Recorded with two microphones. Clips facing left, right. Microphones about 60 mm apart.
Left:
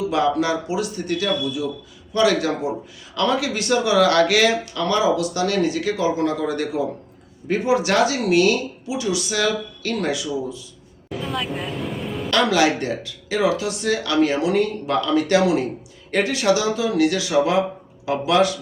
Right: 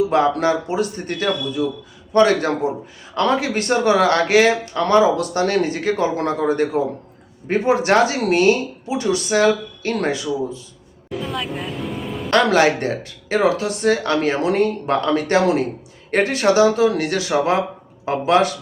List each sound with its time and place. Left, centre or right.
0.1 s speech: right
11.1 s vehicle: centre
12.3 s speech: right